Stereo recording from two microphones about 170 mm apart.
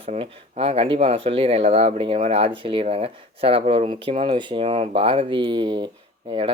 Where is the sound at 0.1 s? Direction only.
40° right (ahead or behind).